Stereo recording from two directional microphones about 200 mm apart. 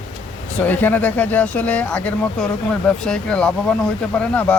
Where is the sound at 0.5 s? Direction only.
10° left (ahead or behind).